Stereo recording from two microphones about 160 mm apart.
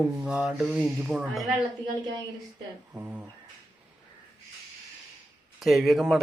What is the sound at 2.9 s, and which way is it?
Speech, 10° right (ahead or behind).